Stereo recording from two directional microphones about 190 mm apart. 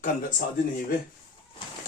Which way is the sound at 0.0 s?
45° left (ahead or behind).